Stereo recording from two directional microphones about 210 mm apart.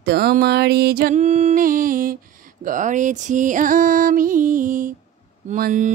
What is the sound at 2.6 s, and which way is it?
Music, 35° right (ahead or behind).